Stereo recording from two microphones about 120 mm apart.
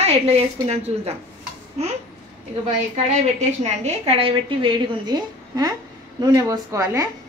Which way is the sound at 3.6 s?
65° right (ahead or behind).